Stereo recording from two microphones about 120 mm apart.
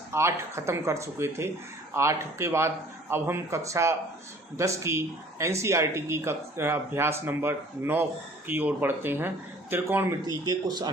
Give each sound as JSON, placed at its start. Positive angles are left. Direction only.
{"t": 0.1, "sound": "speech", "side_deg": -25}
{"t": 10.4, "sound": "speech", "side_deg": -35}